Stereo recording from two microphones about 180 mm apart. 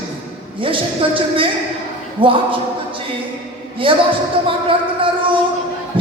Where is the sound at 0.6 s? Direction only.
30° right (ahead or behind).